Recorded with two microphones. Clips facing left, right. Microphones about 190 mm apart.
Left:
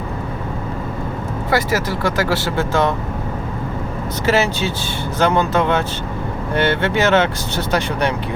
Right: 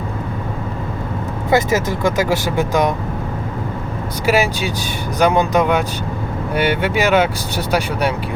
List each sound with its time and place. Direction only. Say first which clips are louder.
1.5 s speech: right 3 dB; 20° right (ahead or behind)
4.3 s speech: right 1 dB; 10° right (ahead or behind)